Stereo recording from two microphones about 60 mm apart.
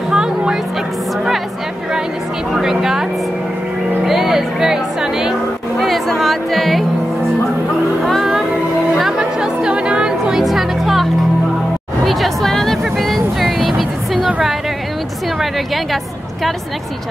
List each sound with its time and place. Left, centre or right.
0.1 s music: centre
2.5 s a sound: centre
4.0 s music: centre
5.8 s music: centre
8.0 s music: centre
12.0 s vehicle: centre